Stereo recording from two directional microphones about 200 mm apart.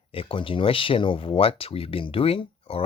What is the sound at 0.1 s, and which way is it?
Speech, 25° left (ahead or behind).